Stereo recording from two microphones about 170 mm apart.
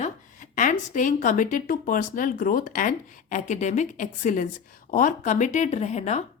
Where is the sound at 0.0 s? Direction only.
50° left (ahead or behind).